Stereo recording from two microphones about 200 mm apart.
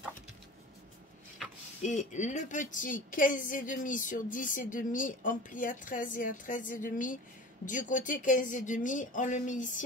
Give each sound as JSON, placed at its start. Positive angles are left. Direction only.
{"t": 1.8, "sound": "a woman's voice", "side_deg": 35}